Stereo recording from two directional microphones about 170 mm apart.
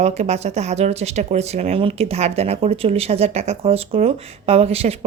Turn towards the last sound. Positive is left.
turn(degrees=-35)  # may be behind; listen again after turning